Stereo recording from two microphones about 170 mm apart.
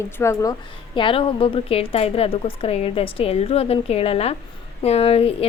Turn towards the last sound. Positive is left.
turn(degrees=35)  # may be behind; listen again after turning